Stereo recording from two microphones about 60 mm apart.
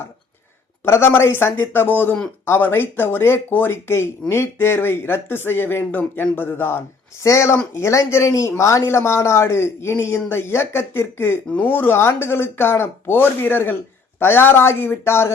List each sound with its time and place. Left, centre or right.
0.9 s speech: left
7.2 s speech: left